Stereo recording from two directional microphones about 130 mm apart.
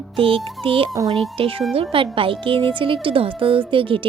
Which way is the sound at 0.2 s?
45° right (ahead or behind).